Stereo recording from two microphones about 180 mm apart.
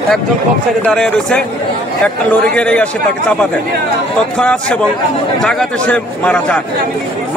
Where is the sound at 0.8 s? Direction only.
5° left (ahead or behind).